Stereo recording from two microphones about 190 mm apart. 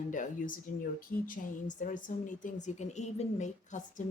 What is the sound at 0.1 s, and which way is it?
A woman's voice, 45° left (ahead or behind).